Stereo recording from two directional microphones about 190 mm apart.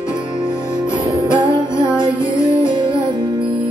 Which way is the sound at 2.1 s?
25° right (ahead or behind).